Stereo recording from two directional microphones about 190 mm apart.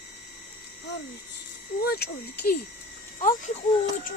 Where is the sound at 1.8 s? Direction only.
55° left (ahead or behind).